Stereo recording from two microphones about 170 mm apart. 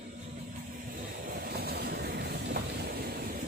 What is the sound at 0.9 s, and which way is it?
Train, 55° right (ahead or behind).